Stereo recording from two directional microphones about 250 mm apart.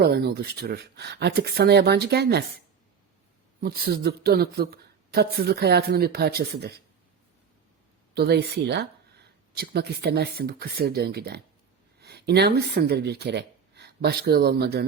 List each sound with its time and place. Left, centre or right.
0.0 s speech: right
3.6 s speech: right
8.1 s speech: right